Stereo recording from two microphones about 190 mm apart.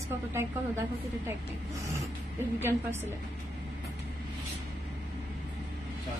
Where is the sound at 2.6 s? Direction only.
10° right (ahead or behind).